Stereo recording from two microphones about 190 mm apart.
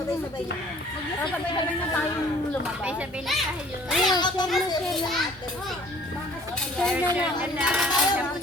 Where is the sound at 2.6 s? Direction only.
5° right (ahead or behind).